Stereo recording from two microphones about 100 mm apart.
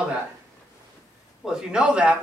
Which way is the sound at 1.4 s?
5° right (ahead or behind).